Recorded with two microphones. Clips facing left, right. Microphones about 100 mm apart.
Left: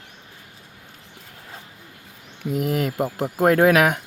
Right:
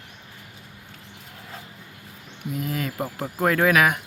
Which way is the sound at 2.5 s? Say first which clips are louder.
Left 6 dB; 65° left (ahead or behind).